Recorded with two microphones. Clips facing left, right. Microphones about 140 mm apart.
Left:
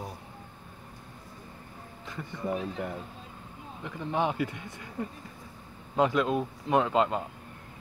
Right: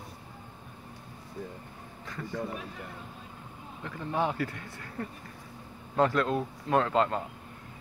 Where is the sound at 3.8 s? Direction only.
20° left (ahead or behind).